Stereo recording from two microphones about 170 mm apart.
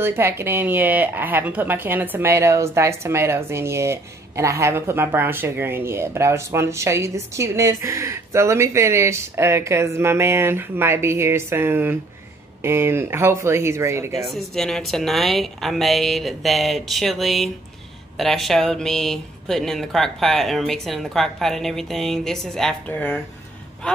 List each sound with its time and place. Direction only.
0.0 s speech: 15° right (ahead or behind)
14.3 s speech: 5° left (ahead or behind)